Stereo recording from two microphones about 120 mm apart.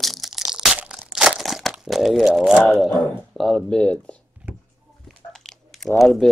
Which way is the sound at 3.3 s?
5° left (ahead or behind).